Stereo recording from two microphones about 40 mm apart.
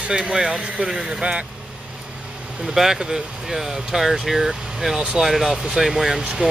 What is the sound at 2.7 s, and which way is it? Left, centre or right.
Speech, centre.